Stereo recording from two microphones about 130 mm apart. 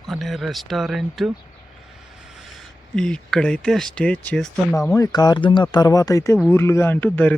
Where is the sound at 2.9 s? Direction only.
5° left (ahead or behind).